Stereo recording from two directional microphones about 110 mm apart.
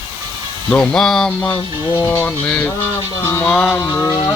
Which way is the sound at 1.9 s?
30° left (ahead or behind).